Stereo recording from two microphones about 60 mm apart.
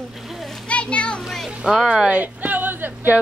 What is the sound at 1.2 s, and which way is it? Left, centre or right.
Speech, centre.